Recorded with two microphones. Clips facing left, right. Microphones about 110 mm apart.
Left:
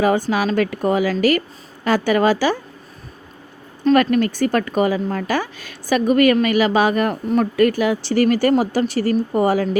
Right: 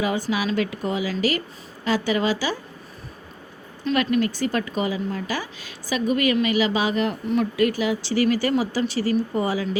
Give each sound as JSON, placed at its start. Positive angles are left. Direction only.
{"t": 0.0, "sound": "speech", "side_deg": 50}
{"t": 3.8, "sound": "speech", "side_deg": 50}